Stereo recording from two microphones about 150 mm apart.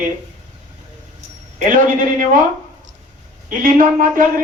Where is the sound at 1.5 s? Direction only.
60° right (ahead or behind).